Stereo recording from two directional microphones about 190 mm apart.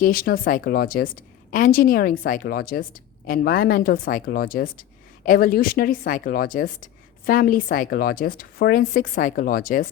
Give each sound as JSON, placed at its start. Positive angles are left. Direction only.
{"t": 0.0, "sound": "a woman's voice", "side_deg": 50}